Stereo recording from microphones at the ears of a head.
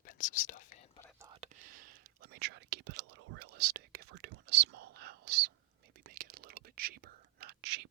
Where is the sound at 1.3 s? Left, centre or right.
Right.